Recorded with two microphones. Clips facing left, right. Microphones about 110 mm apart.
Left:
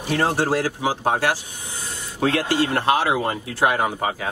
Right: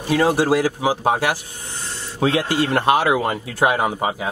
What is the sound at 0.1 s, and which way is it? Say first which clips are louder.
Speech: right 4 dB; 10° right (ahead or behind).